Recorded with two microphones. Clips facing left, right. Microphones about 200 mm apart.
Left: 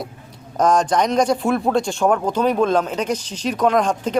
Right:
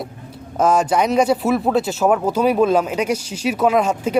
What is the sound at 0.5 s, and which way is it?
A man's voice, 5° right (ahead or behind).